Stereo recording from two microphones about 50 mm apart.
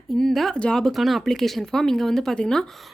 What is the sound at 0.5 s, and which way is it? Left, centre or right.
Speech, centre.